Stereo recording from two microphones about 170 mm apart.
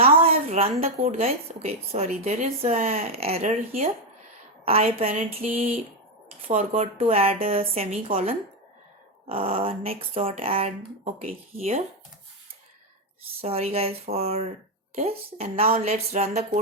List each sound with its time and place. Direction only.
0.0 s a woman's voice: 35° right (ahead or behind)
13.4 s a woman's voice: 35° right (ahead or behind)